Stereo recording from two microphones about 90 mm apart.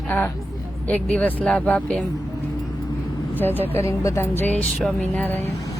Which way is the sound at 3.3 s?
20° left (ahead or behind).